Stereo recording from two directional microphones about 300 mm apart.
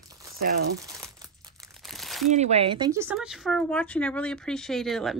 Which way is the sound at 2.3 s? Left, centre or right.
Right.